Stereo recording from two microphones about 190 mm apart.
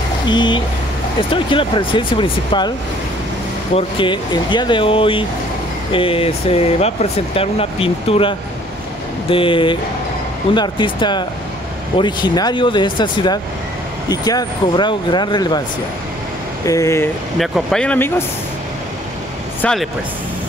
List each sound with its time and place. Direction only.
0.3 s speech: 25° left (ahead or behind)
3.7 s speech: 25° left (ahead or behind)
16.6 s speech: 15° left (ahead or behind)
17.4 s speech: centre (ahead or behind)
19.6 s speech: 5° left (ahead or behind)